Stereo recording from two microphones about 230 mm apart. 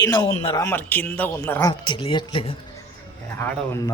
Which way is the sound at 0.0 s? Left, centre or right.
Centre.